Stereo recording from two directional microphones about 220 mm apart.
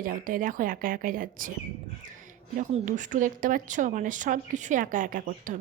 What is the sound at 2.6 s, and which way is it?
A woman's voice, 35° right (ahead or behind).